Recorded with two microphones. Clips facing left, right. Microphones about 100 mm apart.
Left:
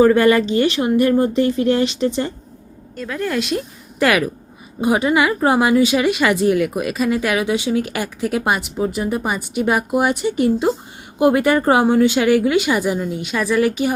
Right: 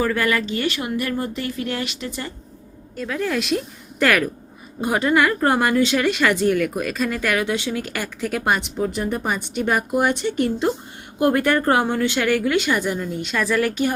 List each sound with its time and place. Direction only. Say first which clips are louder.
0.0 s speech: left 9 dB; 25° left (ahead or behind)
2.9 s speech: left 1 dB; centre (ahead or behind)